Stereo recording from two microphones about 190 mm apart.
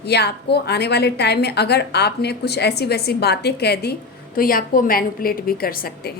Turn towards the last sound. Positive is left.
turn(degrees=55)  # may be behind; listen again after turning